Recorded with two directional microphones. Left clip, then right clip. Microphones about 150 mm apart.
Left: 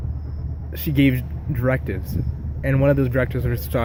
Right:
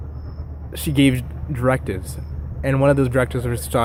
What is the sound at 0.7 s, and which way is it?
Speech, 25° right (ahead or behind).